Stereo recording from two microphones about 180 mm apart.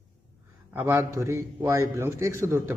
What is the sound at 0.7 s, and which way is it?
A man's voice, 15° right (ahead or behind).